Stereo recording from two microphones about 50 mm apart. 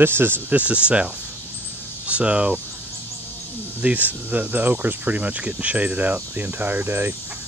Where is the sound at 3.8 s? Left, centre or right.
Right.